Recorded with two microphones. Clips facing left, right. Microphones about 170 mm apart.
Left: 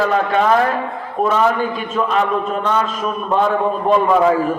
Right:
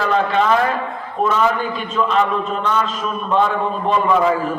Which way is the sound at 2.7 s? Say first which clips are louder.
Left 2 dB; 50° left (ahead or behind).